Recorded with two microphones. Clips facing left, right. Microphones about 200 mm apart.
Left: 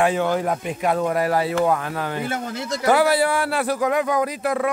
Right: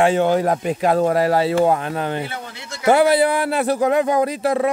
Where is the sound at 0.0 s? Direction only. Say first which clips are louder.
Right 4 dB; 30° right (ahead or behind).